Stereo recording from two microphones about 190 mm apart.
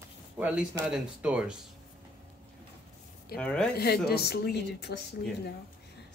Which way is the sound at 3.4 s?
5° left (ahead or behind).